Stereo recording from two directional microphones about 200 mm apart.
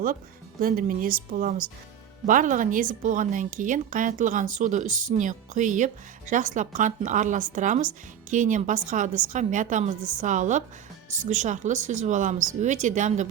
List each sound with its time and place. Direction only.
0.6 s a woman's voice: 45° right (ahead or behind)